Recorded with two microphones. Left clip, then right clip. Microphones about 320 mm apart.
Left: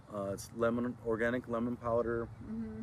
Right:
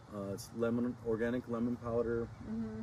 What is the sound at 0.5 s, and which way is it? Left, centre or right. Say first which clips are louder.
Speech: left 2 dB; centre.